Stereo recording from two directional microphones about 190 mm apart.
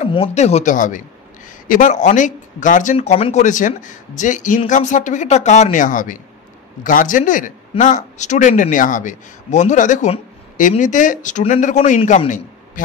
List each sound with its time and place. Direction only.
0.0 s a man's voice: 30° left (ahead or behind)